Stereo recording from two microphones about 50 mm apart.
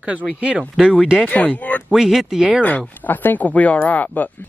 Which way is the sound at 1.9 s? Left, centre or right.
Centre.